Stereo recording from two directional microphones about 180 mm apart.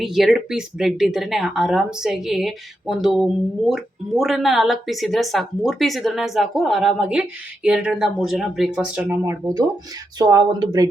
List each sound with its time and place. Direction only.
0.0 s speech: centre (ahead or behind); by 10.8 s 20° right (ahead or behind)